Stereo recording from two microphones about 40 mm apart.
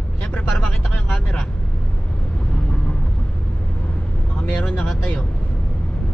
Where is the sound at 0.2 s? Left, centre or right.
Left.